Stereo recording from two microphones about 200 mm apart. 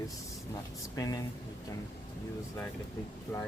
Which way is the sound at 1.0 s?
15° left (ahead or behind).